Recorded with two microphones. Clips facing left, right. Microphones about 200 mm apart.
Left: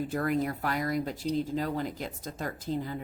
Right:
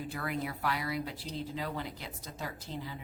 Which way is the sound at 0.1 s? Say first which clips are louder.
Left 7 dB; 45° left (ahead or behind).